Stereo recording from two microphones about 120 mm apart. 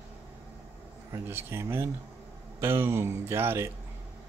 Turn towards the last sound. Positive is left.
turn(degrees=-20)  # may be behind; listen again after turning